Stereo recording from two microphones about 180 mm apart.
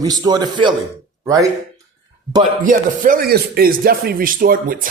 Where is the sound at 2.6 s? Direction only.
50° right (ahead or behind).